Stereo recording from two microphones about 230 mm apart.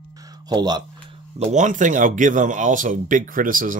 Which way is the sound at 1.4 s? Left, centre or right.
Right.